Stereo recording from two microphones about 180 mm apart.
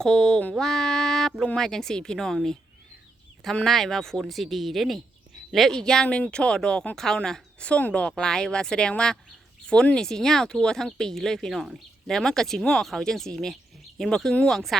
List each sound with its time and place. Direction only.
0.0 s speech: 5° left (ahead or behind)